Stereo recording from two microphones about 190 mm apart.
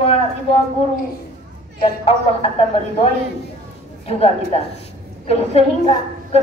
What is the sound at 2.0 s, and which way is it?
A woman's voice, 30° left (ahead or behind).